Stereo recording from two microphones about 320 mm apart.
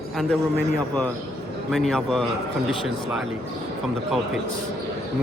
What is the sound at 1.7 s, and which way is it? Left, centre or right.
Speech, centre.